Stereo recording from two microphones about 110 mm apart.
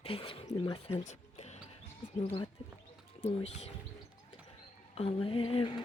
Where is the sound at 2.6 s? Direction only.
55° left (ahead or behind).